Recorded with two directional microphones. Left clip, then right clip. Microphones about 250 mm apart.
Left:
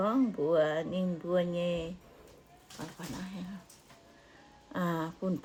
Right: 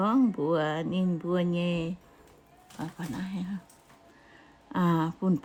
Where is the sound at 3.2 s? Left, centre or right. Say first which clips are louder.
Right 6 dB; right.